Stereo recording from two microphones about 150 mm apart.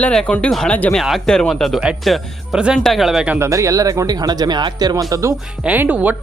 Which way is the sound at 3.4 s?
20° right (ahead or behind).